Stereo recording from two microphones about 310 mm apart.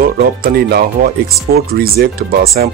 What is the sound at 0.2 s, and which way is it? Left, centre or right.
Speech, right.